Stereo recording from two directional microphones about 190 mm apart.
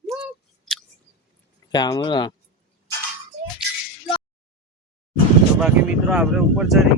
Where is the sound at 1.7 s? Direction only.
20° left (ahead or behind).